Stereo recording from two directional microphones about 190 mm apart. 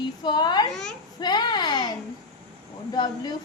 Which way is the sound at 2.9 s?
20° left (ahead or behind).